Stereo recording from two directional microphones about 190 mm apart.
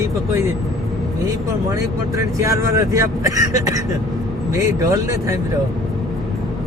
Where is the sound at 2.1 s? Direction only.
15° right (ahead or behind).